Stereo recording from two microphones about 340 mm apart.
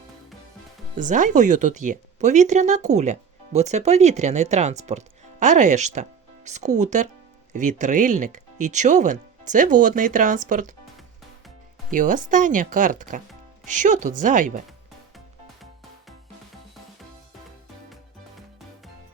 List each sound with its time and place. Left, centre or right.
0.9 s speech: right
11.9 s speech: right